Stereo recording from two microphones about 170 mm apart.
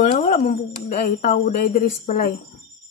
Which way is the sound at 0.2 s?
55° left (ahead or behind).